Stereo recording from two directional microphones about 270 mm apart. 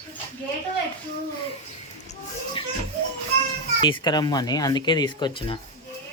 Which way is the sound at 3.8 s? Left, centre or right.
Centre.